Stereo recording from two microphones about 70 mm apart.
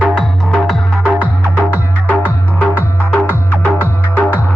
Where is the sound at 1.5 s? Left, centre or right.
Left.